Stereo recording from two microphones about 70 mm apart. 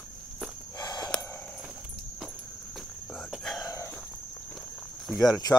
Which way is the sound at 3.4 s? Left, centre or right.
Centre.